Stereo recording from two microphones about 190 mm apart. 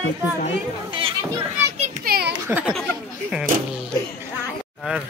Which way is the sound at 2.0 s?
55° right (ahead or behind).